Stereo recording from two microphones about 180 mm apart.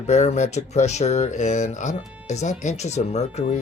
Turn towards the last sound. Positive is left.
turn(degrees=40)  # may be behind; listen again after turning